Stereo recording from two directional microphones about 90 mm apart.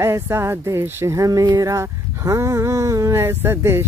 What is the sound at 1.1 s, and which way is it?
Speech, 40° right (ahead or behind).